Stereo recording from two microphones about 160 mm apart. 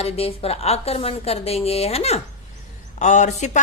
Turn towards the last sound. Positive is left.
turn(degrees=45)  # may be behind; listen again after turning